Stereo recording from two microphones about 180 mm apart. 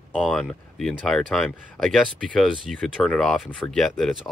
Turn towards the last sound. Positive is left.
turn(degrees=0)  # may be behind; listen again after turning